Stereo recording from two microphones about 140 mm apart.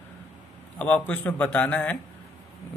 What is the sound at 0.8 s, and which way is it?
Speech, 10° left (ahead or behind).